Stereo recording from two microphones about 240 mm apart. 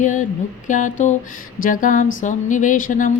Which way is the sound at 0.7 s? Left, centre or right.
Left.